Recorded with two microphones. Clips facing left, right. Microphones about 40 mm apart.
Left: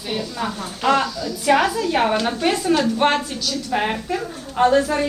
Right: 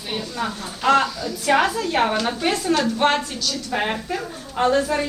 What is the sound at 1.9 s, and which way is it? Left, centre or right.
A woman's voice, centre.